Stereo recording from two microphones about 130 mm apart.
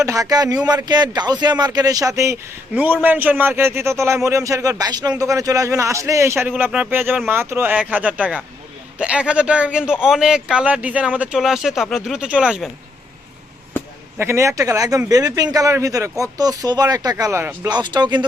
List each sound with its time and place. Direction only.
0.0 s a man's voice: 25° right (ahead or behind)
2.7 s a man's voice: 15° right (ahead or behind)
14.2 s a man's voice: 20° right (ahead or behind)
17.7 s speech: 35° right (ahead or behind)